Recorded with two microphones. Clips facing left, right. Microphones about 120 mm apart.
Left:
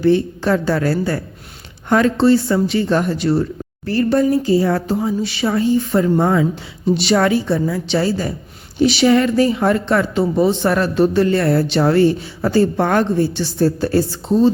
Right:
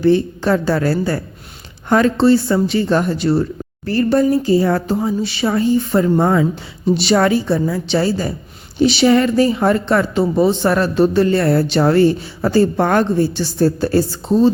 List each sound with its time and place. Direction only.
0.0 s speech: 35° right (ahead or behind)